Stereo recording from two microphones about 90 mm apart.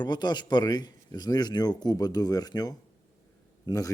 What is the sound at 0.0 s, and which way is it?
Speech, 50° left (ahead or behind).